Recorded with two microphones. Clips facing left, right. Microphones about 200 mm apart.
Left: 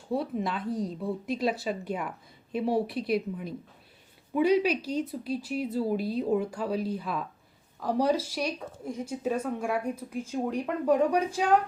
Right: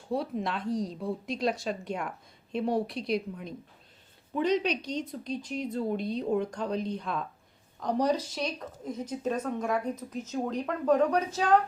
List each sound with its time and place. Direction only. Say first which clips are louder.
0.1 s speech: left 1 dB; centre (ahead or behind)